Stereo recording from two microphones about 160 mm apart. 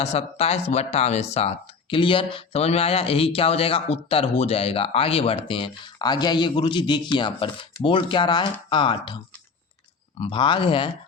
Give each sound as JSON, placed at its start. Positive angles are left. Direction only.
{"t": 0.0, "sound": "speech", "side_deg": 40}